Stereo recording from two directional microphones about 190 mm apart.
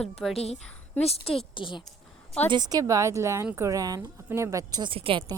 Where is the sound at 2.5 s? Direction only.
20° right (ahead or behind).